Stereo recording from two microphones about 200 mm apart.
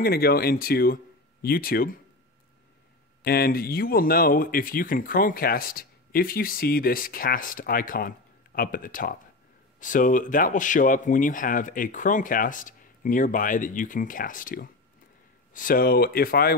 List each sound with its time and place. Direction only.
0.0 s speech: 50° left (ahead or behind)
3.3 s speech: 50° left (ahead or behind)